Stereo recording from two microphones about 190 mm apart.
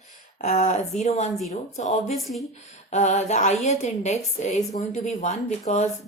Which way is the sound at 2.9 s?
35° left (ahead or behind).